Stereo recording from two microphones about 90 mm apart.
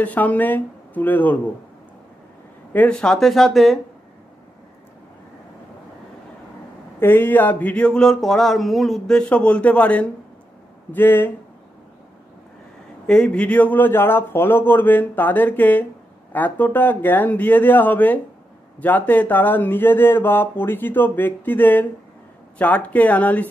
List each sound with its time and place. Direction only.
0.0 s speech: 20° left (ahead or behind)
2.7 s speech: 20° left (ahead or behind)
3.0 s speech: 5° left (ahead or behind)
7.0 s a sound: 25° left (ahead or behind)
10.9 s speech: 25° left (ahead or behind)
13.0 s speech: 10° left (ahead or behind)
22.6 s a sound: 15° left (ahead or behind)